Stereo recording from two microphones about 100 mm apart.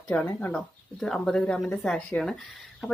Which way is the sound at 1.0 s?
5° left (ahead or behind).